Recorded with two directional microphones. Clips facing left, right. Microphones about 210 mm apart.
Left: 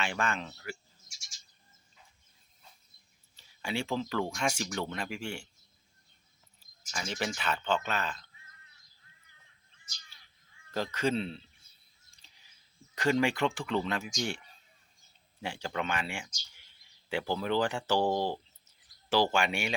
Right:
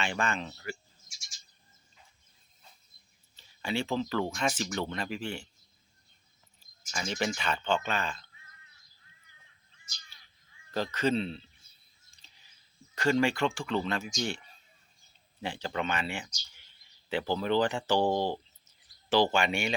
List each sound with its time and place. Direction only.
0.0 s speech: 5° left (ahead or behind)
3.3 s speech: 10° left (ahead or behind)
6.9 s speech: 5° left (ahead or behind)
10.8 s speech: 10° left (ahead or behind)
12.2 s a sound: 10° left (ahead or behind)
13.0 s speech: 15° left (ahead or behind)